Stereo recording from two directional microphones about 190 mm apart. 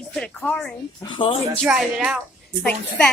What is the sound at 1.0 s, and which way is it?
Speech, 25° left (ahead or behind).